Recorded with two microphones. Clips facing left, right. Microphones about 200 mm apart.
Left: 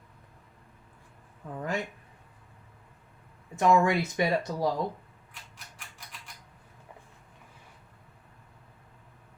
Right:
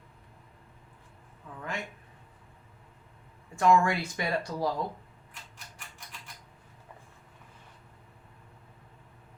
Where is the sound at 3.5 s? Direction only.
20° left (ahead or behind).